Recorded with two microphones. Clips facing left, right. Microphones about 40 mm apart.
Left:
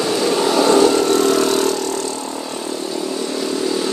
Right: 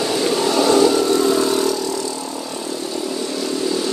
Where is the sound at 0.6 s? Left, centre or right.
Left.